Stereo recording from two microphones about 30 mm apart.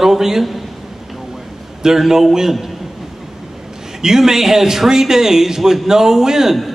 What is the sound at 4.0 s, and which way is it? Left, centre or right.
A man's voice, centre.